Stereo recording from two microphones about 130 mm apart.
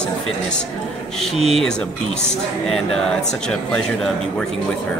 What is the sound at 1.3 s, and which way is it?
Speech, 55° right (ahead or behind).